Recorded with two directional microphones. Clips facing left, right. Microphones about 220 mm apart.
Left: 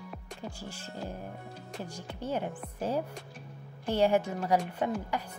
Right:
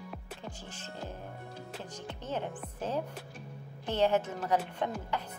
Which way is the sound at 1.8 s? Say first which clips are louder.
Left 6 dB; 10° left (ahead or behind).